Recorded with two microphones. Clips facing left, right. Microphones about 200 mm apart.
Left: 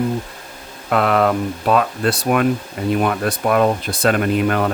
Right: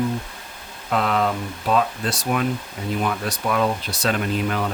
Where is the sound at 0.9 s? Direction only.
60° left (ahead or behind).